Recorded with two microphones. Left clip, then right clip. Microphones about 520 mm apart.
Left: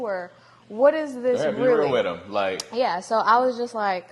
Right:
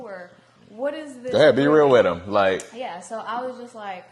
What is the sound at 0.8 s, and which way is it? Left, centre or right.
Speech, left.